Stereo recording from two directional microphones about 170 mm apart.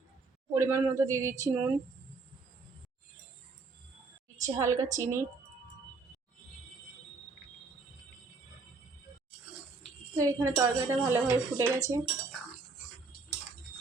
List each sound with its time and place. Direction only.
0.5 s a woman's voice: 15° right (ahead or behind)
4.4 s a woman's voice: 20° right (ahead or behind)
10.2 s a woman's voice: 20° right (ahead or behind)